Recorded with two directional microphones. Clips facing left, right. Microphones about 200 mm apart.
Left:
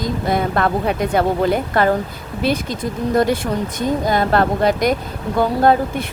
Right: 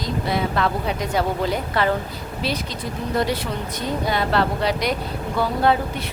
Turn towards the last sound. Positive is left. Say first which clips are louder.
# left 5 dB
turn(degrees=45)  # may be behind; listen again after turning